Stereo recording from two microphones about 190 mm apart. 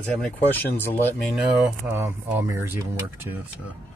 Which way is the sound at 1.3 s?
Centre (ahead or behind).